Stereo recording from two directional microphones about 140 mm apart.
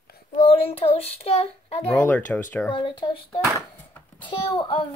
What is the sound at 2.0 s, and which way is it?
Speech, 10° left (ahead or behind).